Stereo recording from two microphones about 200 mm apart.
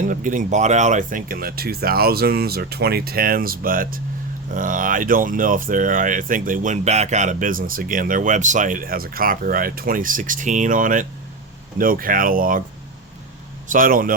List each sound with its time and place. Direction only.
0.0 s speech: 40° right (ahead or behind)
13.7 s speech: 45° right (ahead or behind)